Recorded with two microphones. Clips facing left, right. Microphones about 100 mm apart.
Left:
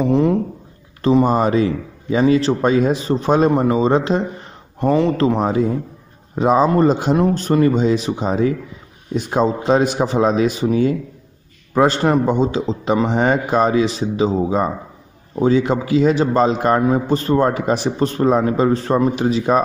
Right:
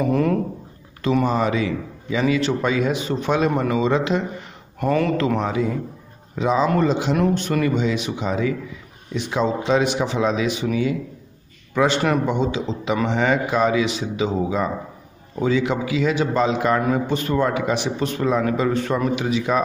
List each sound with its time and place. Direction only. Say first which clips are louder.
0.0 s speech: left 4 dB; 20° left (ahead or behind)
1.0 s a man's voice: left 5 dB; 40° left (ahead or behind)
15.4 s a man's voice: left 4 dB; 40° left (ahead or behind)